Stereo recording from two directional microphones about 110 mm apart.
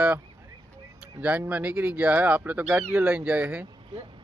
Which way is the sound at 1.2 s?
15° right (ahead or behind).